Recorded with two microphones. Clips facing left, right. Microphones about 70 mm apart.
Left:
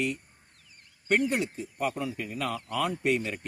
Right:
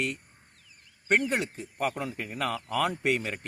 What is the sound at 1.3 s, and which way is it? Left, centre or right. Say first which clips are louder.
A man's voice: even; right.